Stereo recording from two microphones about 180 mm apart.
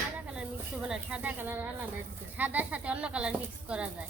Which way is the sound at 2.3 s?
10° right (ahead or behind).